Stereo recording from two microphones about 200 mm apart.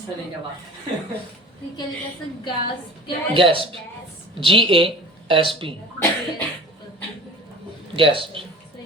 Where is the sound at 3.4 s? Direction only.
25° right (ahead or behind).